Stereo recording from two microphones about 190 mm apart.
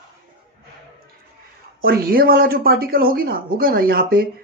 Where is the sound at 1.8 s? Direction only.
50° right (ahead or behind).